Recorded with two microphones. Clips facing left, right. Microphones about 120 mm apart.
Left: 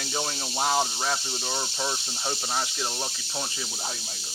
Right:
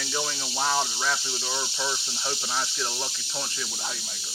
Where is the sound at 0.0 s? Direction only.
30° left (ahead or behind).